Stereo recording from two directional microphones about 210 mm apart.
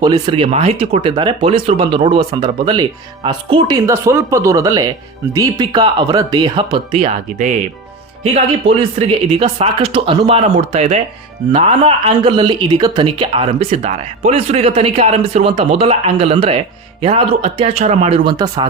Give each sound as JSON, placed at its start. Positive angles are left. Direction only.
{"t": 0.0, "sound": "speech", "side_deg": -20}